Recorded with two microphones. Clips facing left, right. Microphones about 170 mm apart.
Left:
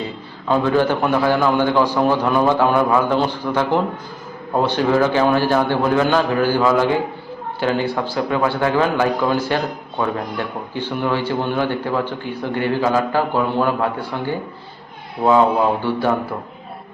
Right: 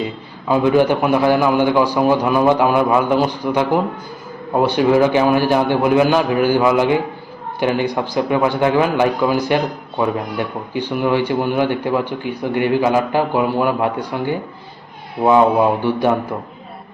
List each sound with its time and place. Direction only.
0.4 s speech: 10° right (ahead or behind)